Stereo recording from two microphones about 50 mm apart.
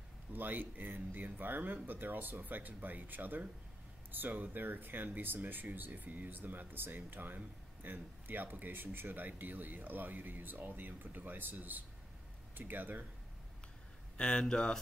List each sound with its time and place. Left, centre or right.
0.3 s speech: right
14.1 s speech: left